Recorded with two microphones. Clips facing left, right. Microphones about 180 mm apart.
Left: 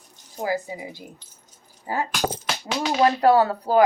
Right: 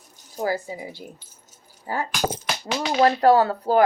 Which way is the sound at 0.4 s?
15° left (ahead or behind).